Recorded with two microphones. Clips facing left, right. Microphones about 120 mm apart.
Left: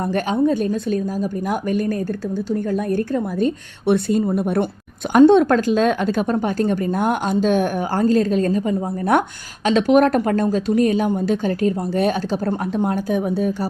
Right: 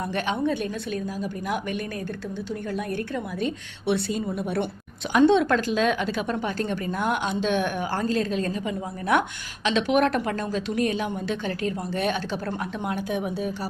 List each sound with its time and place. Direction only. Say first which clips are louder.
0.0 s a woman's voice: left 7 dB; 45° left (ahead or behind)